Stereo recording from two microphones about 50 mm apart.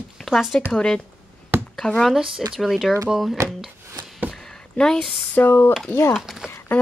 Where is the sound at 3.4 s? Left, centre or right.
Right.